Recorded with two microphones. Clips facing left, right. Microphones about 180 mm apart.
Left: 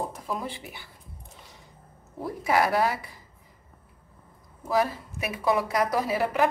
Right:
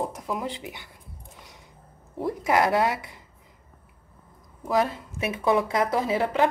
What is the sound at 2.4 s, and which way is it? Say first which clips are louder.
Speech: right 1 dB; 20° right (ahead or behind).